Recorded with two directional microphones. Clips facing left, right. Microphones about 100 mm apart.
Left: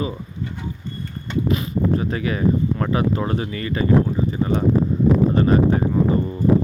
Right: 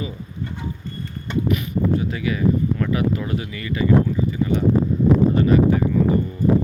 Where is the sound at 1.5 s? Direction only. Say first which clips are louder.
Left 1 dB; 35° left (ahead or behind).